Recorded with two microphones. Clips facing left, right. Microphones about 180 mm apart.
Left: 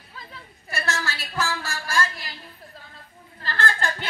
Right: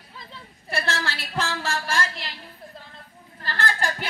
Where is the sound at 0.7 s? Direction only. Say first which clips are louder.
Right 1 dB; 30° right (ahead or behind).